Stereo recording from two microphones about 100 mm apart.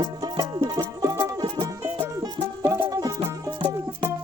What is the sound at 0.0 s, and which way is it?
Music, 35° right (ahead or behind).